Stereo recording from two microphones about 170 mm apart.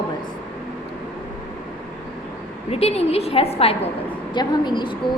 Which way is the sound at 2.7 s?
35° left (ahead or behind).